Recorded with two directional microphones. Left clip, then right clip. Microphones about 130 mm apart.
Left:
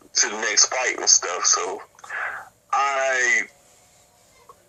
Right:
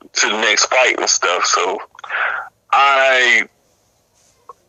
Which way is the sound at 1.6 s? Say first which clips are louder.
Right 9 dB; 50° right (ahead or behind).